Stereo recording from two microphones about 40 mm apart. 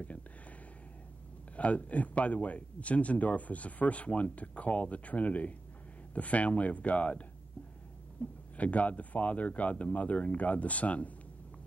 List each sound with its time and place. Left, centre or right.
1.6 s speech: left